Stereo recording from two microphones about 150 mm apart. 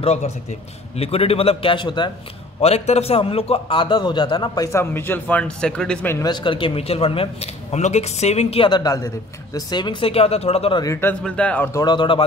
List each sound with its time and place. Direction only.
0.0 s a man's voice: 45° left (ahead or behind)
2.6 s a man's voice: 45° left (ahead or behind)
4.7 s a man's voice: 15° left (ahead or behind)
6.1 s a man's voice: 30° left (ahead or behind)
10.8 s a man's voice: 20° left (ahead or behind)
11.2 s a man's voice: 10° left (ahead or behind)
11.7 s a man's voice: 30° left (ahead or behind)